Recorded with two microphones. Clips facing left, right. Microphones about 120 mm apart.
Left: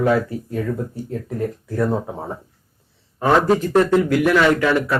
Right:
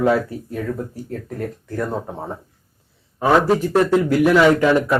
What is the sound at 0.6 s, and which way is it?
Speech, centre (ahead or behind).